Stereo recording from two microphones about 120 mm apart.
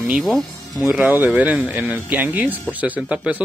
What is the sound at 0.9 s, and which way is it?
Speech, 15° right (ahead or behind).